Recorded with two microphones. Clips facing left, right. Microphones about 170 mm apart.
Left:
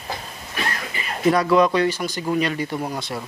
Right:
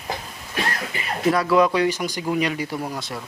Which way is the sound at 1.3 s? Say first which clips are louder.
Left 1 dB; 5° right (ahead or behind).